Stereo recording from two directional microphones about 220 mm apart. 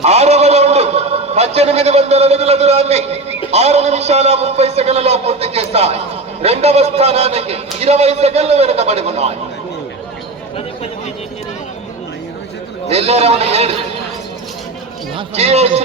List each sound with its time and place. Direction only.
0.0 s a sound: 30° right (ahead or behind)
3.5 s a man's voice: 30° right (ahead or behind)
12.9 s a man's voice: 30° right (ahead or behind)
15.4 s a man's voice: 30° right (ahead or behind)